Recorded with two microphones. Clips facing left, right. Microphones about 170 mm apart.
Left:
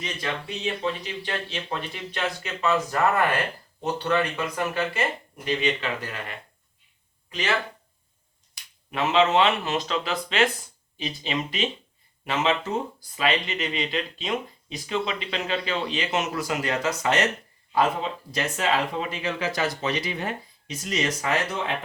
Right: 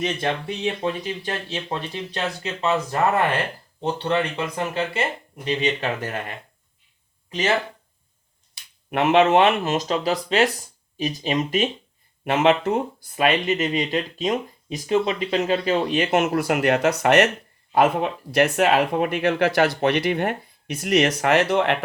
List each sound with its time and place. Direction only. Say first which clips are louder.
0.0 s speech: right 7 dB; 55° right (ahead or behind)
0.6 s speech: right 2 dB; 45° right (ahead or behind)
1.7 s speech: right 4 dB; 35° right (ahead or behind)
3.8 s speech: right 2 dB; 25° right (ahead or behind)
5.6 s speech: right 3 dB; 45° right (ahead or behind)
8.9 s speech: right 5 dB; 60° right (ahead or behind)
12.2 s speech: right 7 dB; 55° right (ahead or behind); by 21.8 s 70° right (ahead or behind)